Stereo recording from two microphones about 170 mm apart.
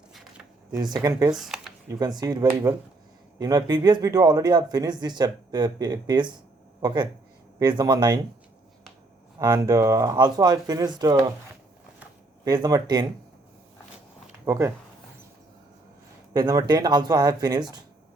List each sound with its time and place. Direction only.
0.1 s a sound: centre (ahead or behind)
0.8 s speech: 25° right (ahead or behind)
1.3 s speech: 5° right (ahead or behind)
1.9 s speech: 25° right (ahead or behind)
9.4 s speech: 20° right (ahead or behind)
12.5 s speech: 20° right (ahead or behind)
14.4 s speech: 15° right (ahead or behind)
16.3 s speech: 20° right (ahead or behind)